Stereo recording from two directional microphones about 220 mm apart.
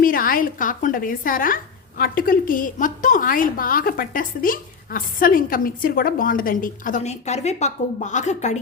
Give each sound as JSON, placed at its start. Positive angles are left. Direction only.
{"t": 0.0, "sound": "a woman's voice", "side_deg": 40}